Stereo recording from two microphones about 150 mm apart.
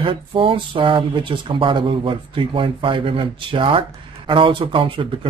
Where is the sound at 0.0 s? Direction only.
35° right (ahead or behind).